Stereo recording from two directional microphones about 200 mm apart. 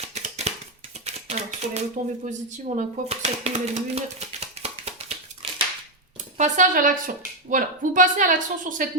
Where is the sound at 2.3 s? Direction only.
35° right (ahead or behind).